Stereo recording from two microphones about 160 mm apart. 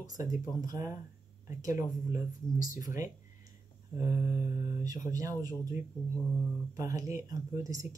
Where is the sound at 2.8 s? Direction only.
20° right (ahead or behind).